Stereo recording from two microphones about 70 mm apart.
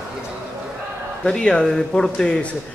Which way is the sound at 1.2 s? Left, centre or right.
Centre.